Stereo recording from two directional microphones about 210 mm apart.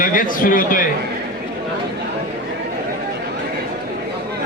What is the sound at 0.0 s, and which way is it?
Speech, 40° left (ahead or behind).